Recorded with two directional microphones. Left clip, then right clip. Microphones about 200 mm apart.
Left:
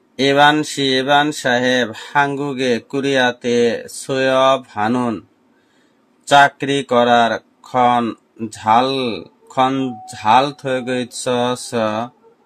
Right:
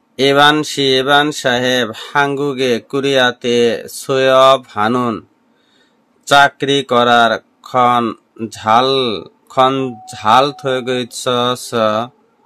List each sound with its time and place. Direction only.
0.1 s speech: 25° right (ahead or behind)
6.2 s speech: 30° right (ahead or behind)